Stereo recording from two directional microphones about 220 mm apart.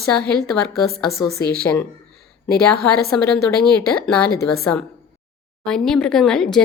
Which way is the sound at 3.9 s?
5° left (ahead or behind).